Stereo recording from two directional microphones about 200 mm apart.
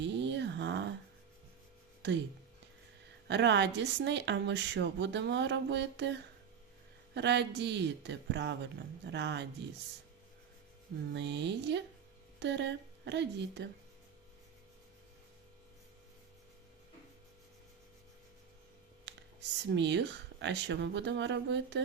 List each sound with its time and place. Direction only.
0.0 s a sound: 60° right (ahead or behind)
2.0 s speech: 60° right (ahead or behind)
3.2 s speech: 60° right (ahead or behind)
11.1 s speech: 60° right (ahead or behind)
19.0 s speech: 60° right (ahead or behind)